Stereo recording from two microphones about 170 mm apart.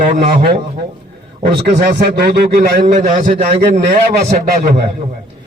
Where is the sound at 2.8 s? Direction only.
45° right (ahead or behind).